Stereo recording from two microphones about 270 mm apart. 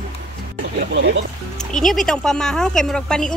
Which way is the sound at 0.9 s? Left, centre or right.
Right.